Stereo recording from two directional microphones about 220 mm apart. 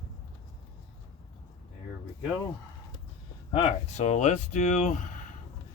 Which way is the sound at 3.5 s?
25° left (ahead or behind).